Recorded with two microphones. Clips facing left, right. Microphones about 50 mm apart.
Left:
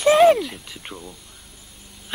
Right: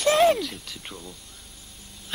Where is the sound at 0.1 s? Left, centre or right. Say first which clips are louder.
Left 6 dB; centre.